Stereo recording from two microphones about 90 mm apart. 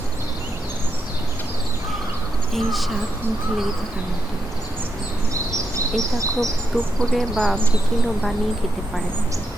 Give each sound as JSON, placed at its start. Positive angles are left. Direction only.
{"t": 2.6, "sound": "speech", "side_deg": 0}
{"t": 5.5, "sound": "bird", "side_deg": -35}
{"t": 6.7, "sound": "speech", "side_deg": 10}